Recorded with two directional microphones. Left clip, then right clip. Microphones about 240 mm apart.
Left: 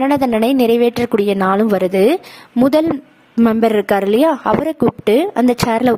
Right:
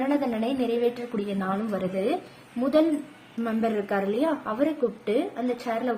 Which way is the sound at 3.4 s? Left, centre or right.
Left.